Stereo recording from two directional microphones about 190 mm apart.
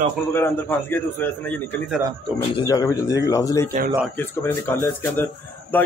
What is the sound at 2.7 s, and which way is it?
A man's voice, 15° left (ahead or behind).